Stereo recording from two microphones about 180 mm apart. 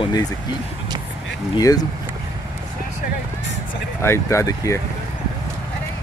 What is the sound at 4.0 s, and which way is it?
Speech, 15° left (ahead or behind).